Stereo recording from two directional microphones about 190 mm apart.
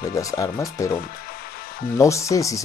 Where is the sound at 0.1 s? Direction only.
15° left (ahead or behind).